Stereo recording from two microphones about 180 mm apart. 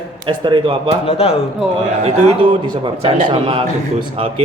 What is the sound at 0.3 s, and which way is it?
Speech, 25° right (ahead or behind).